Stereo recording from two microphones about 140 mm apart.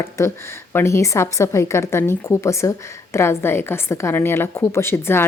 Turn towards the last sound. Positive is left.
turn(degrees=15)  # may be behind; listen again after turning